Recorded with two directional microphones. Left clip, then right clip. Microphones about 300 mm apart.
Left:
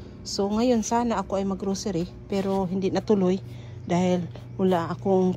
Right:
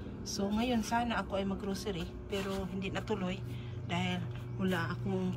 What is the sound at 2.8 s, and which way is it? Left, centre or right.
Speech, left.